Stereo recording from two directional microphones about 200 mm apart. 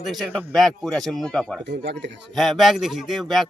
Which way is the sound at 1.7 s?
60° right (ahead or behind).